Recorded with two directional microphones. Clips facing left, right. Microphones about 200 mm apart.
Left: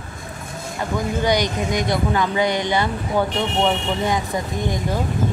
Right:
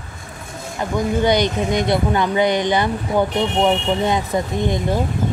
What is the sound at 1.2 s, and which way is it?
Speech, 25° right (ahead or behind).